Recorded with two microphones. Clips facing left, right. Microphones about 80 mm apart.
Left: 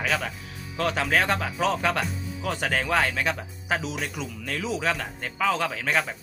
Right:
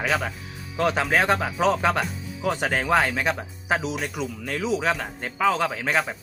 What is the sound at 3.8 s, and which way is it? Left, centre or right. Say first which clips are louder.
Speech: right 3 dB; centre.